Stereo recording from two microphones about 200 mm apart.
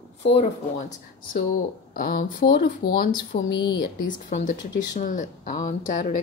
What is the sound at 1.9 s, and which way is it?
Speech, 45° left (ahead or behind).